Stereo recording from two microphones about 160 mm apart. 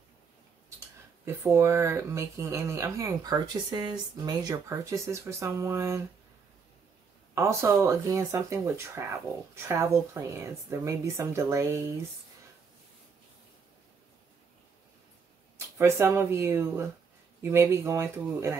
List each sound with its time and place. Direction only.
1.2 s speech: 15° right (ahead or behind)
7.3 s speech: 15° right (ahead or behind)
15.5 s speech: 15° right (ahead or behind)